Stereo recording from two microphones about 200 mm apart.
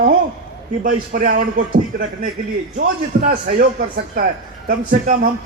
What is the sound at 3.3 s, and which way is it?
A man's voice, 45° right (ahead or behind).